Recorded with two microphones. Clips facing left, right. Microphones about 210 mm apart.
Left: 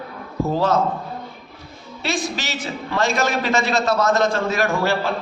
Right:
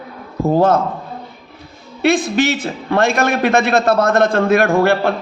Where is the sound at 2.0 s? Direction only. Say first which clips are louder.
Right 11 dB; 55° right (ahead or behind).